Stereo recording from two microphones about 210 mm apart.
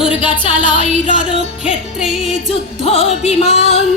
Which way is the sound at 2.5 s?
30° left (ahead or behind).